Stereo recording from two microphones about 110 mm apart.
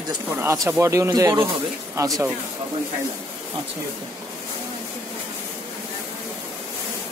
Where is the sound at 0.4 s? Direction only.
25° right (ahead or behind).